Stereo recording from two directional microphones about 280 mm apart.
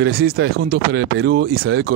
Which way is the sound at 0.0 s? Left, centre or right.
Right.